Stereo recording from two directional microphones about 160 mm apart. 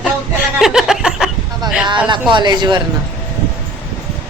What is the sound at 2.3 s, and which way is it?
Speech, 25° right (ahead or behind).